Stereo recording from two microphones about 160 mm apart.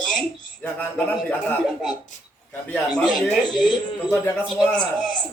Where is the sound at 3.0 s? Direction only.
Centre (ahead or behind).